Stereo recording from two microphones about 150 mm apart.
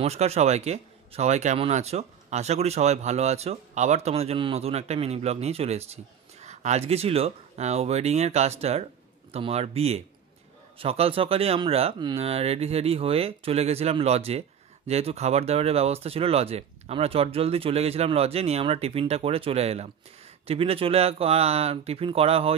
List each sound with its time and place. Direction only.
0.0 s speech: 45° right (ahead or behind)